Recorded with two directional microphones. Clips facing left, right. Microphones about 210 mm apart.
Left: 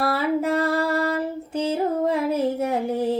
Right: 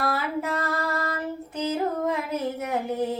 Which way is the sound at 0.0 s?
30° left (ahead or behind).